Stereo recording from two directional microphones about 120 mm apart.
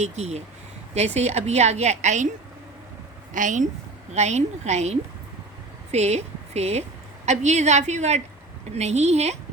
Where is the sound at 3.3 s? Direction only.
90° right.